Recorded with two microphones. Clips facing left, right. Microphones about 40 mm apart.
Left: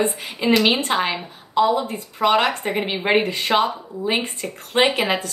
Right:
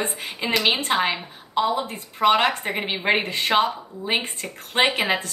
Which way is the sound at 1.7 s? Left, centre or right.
Right.